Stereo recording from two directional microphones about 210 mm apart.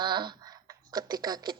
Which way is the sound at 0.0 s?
20° right (ahead or behind).